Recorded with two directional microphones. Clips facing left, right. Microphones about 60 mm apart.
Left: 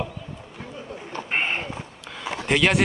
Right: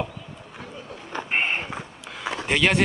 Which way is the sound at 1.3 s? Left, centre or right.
Centre.